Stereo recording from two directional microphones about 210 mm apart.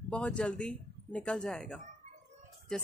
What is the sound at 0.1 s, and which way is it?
Speech, 5° left (ahead or behind).